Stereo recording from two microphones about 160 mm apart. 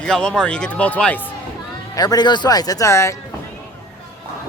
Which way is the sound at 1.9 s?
25° left (ahead or behind).